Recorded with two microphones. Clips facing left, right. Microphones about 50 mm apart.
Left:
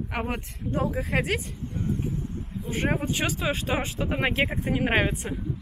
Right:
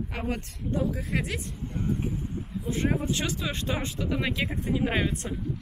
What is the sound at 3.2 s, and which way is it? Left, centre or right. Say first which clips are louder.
Speech: left 4 dB; centre.